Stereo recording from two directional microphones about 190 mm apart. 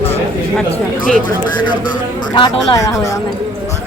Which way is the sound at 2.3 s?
25° left (ahead or behind).